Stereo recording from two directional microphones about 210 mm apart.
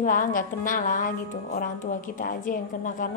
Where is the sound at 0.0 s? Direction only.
40° left (ahead or behind).